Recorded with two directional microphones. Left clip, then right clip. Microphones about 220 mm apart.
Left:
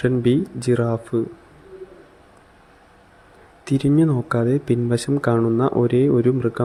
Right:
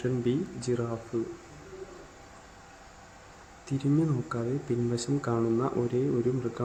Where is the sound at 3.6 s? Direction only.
35° left (ahead or behind).